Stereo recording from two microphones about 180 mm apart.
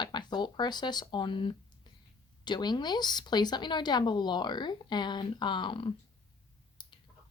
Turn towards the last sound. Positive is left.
turn(degrees=25)  # may be behind; listen again after turning